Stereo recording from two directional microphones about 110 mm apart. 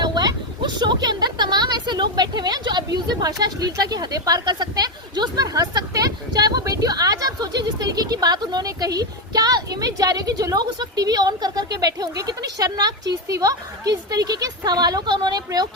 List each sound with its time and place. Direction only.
0.0 s speech: 40° right (ahead or behind)